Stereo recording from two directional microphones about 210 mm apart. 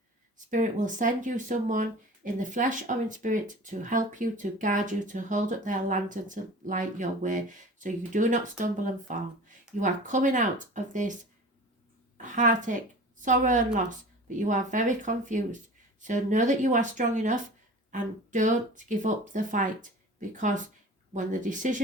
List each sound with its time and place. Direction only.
0.5 s a woman's voice: 35° right (ahead or behind)